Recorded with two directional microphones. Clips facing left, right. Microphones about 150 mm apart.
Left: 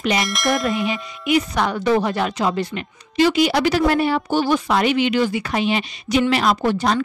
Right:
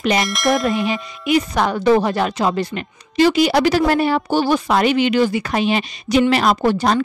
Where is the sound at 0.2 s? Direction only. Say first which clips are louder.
Right 3 dB; centre (ahead or behind).